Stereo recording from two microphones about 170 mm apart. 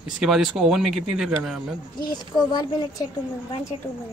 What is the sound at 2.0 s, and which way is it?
Speech, 25° left (ahead or behind).